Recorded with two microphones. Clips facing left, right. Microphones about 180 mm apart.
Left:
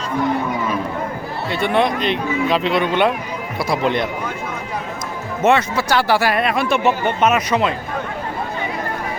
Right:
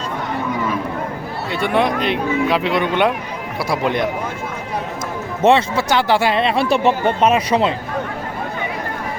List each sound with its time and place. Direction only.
1.6 s speech: 10° right (ahead or behind)
5.4 s speech: 30° right (ahead or behind)